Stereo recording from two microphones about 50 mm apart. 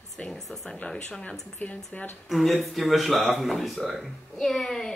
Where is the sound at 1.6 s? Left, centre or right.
Left.